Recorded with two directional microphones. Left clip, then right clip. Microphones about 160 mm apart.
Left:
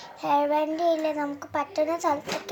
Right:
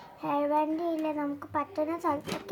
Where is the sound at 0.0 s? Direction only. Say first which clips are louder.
Left 6 dB; 40° right (ahead or behind).